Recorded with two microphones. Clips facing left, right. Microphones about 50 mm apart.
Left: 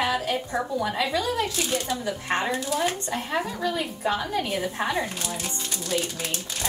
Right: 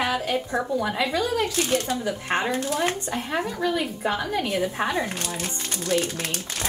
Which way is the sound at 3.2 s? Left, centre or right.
Centre.